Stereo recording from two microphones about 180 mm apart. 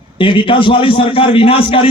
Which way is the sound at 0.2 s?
30° left (ahead or behind).